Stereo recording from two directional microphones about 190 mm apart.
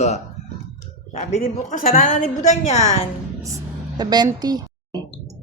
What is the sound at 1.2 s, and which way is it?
A woman's voice, 45° left (ahead or behind).